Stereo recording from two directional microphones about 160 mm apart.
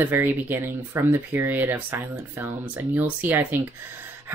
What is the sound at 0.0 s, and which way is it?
Speech, 15° right (ahead or behind).